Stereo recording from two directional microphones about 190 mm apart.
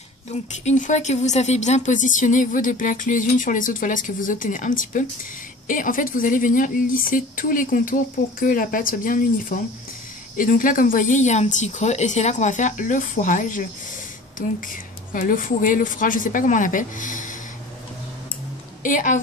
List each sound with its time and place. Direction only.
0.3 s a woman's voice: 40° left (ahead or behind)
18.8 s a woman's voice: 45° left (ahead or behind)